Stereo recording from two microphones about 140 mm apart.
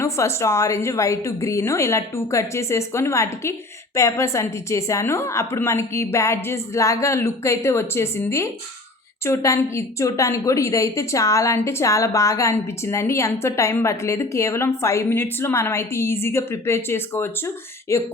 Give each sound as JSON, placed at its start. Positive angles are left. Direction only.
{"t": 0.0, "sound": "a woman's voice", "side_deg": 20}